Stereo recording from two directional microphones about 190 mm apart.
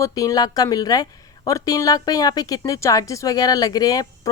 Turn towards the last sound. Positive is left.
turn(degrees=20)  # may be behind; listen again after turning